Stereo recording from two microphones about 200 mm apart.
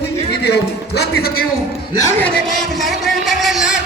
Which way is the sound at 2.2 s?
Centre (ahead or behind).